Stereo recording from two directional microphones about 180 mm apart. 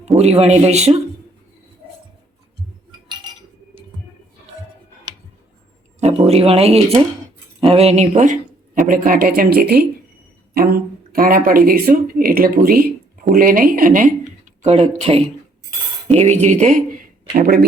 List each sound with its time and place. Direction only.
0.0 s speech: 35° right (ahead or behind)
6.0 s speech: 35° right (ahead or behind)
14.6 s speech: 35° right (ahead or behind); by 17.7 s 55° right (ahead or behind)